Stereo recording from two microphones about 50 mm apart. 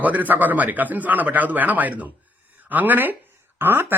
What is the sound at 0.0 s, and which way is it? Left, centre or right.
A man's voice, right.